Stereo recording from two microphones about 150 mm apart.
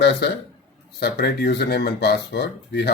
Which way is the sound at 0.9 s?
90° left.